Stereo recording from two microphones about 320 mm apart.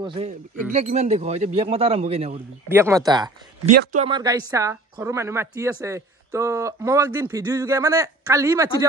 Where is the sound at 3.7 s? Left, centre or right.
Right.